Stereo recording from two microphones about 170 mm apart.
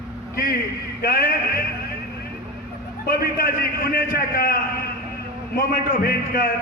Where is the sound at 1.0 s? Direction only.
65° left (ahead or behind).